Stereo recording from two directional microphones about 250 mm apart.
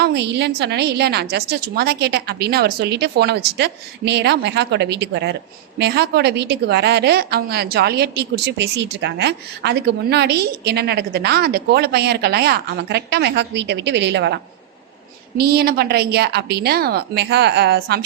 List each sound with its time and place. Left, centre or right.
0.0 s a woman's voice: right
15.4 s a woman's voice: right